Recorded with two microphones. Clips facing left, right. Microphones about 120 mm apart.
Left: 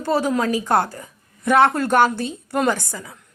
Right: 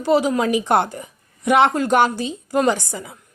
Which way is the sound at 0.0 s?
15° right (ahead or behind).